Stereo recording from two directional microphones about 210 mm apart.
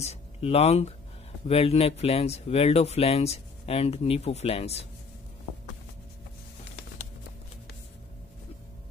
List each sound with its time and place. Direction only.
0.0 s speech: 30° left (ahead or behind)